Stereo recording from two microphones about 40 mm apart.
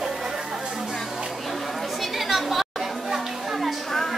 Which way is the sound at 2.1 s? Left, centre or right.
Centre.